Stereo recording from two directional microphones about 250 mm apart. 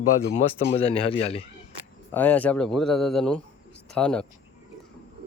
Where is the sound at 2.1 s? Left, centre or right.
Centre.